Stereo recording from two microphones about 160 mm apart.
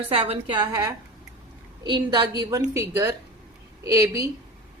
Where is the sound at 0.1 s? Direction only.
40° right (ahead or behind).